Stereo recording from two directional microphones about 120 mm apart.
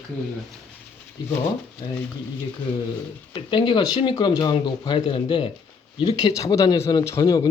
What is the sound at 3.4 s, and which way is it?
Speech, 40° left (ahead or behind).